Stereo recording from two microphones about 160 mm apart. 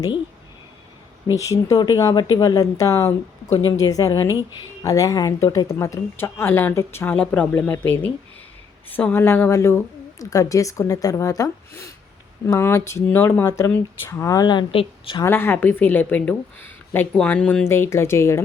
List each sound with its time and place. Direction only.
1.7 s a woman's voice: 25° left (ahead or behind)
15.2 s speech: 15° left (ahead or behind)